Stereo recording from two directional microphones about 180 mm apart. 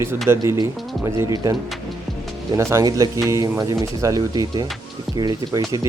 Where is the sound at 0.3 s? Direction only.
15° right (ahead or behind).